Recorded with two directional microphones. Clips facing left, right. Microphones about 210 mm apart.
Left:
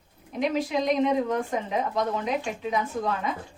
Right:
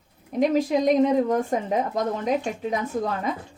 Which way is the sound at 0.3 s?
45° right (ahead or behind).